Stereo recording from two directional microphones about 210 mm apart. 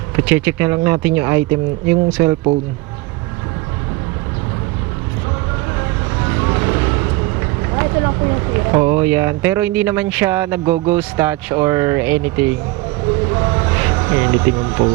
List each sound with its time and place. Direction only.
0.2 s speech: 10° right (ahead or behind)
6.1 s vehicle: 15° right (ahead or behind)
8.8 s speech: 10° right (ahead or behind)
13.2 s music: 20° right (ahead or behind)